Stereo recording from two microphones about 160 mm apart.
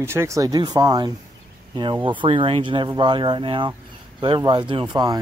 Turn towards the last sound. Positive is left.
turn(degrees=-25)  # may be behind; listen again after turning